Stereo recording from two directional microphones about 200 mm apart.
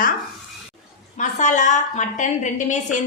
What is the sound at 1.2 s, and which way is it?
A woman's voice, 40° left (ahead or behind).